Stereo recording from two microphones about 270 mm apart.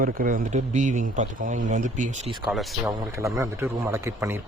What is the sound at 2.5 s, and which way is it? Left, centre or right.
A man's voice, centre.